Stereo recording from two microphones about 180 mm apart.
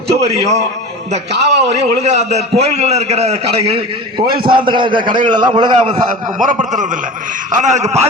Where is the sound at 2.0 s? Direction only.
40° right (ahead or behind).